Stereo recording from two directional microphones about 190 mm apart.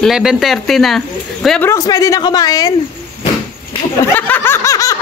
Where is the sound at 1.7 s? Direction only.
15° left (ahead or behind).